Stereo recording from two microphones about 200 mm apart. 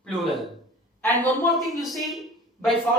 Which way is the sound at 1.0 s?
10° left (ahead or behind).